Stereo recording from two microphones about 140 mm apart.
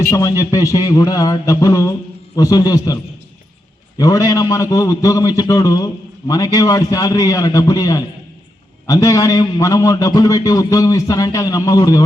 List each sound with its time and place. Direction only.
0.1 s a man's voice: 25° left (ahead or behind)